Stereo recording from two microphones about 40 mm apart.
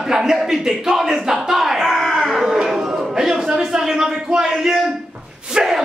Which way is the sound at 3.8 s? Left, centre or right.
Centre.